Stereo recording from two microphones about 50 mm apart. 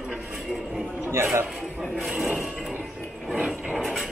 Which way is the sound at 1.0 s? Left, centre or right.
Right.